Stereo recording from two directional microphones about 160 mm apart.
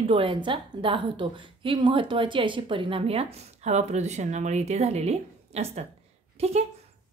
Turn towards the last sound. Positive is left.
turn(degrees=-40)  # may be behind; listen again after turning